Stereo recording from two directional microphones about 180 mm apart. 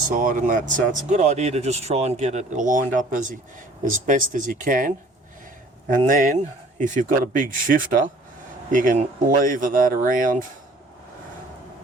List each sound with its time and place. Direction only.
0.1 s speech: 45° right (ahead or behind)
6.1 s speech: 50° right (ahead or behind)